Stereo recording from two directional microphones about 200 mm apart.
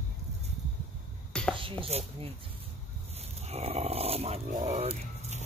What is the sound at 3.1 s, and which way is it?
Speech, 30° right (ahead or behind).